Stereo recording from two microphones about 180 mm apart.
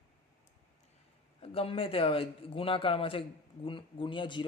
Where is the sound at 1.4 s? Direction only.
30° left (ahead or behind).